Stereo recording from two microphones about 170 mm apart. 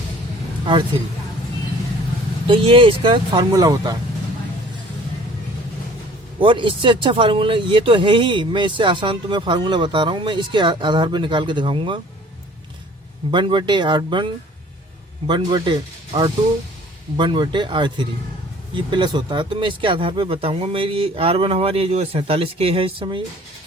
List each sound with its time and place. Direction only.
0.6 s speech: 30° right (ahead or behind)
2.5 s speech: 30° right (ahead or behind)
6.4 s speech: 30° right (ahead or behind)
13.3 s speech: 25° right (ahead or behind)
15.3 s speech: 25° right (ahead or behind)